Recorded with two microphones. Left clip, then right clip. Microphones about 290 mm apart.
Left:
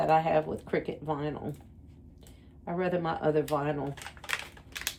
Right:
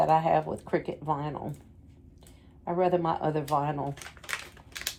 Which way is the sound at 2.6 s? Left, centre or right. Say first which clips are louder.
Right 5 dB; centre.